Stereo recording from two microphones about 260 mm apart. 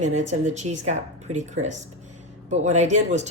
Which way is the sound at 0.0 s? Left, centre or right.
Right.